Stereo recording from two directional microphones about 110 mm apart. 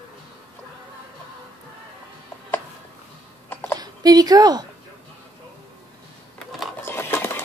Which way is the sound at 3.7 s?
35° right (ahead or behind).